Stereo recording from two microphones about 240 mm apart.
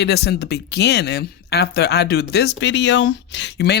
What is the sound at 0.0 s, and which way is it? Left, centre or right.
Speech, left.